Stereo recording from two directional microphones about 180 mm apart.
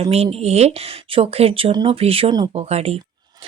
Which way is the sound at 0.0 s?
35° right (ahead or behind).